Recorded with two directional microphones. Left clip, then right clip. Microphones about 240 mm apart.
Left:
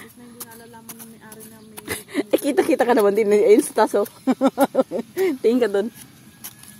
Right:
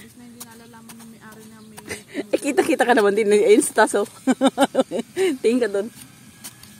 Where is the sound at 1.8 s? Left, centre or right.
Centre.